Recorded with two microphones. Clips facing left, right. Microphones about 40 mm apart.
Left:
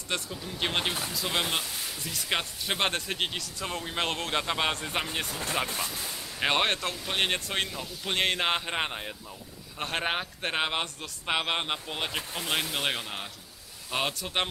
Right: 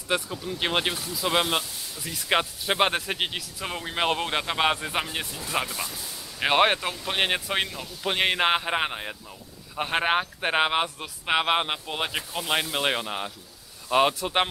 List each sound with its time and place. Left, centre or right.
0.1 s speech: centre